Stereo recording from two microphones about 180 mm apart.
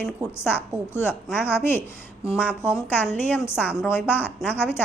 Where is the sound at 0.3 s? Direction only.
15° left (ahead or behind).